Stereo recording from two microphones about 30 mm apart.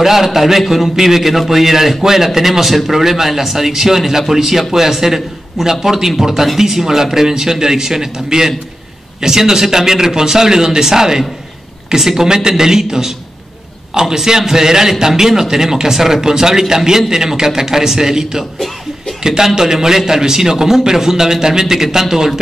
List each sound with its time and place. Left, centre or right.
0.0 s a man's voice: centre